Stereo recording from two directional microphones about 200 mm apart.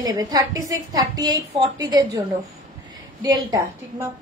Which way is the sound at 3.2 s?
20° right (ahead or behind).